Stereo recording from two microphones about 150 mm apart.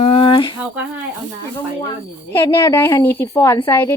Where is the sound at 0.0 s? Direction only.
40° left (ahead or behind).